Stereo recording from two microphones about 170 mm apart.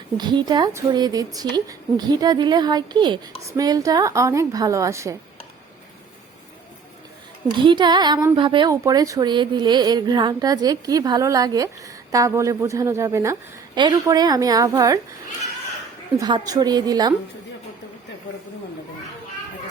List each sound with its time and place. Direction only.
0.2 s a woman's voice: 25° right (ahead or behind)
7.5 s a woman's voice: 30° right (ahead or behind)
16.1 s a woman's voice: 25° right (ahead or behind)